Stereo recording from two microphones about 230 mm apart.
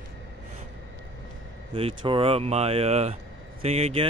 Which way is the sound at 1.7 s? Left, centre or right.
Right.